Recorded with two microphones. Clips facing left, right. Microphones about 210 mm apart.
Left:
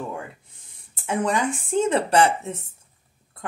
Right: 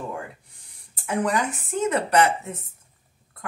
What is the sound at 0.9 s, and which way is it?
Speech, 25° left (ahead or behind).